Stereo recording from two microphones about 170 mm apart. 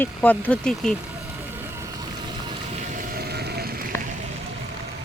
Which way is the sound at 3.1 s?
70° right (ahead or behind).